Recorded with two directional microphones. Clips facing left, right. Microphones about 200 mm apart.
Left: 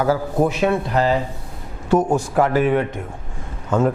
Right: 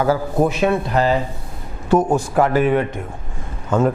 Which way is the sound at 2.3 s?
15° right (ahead or behind).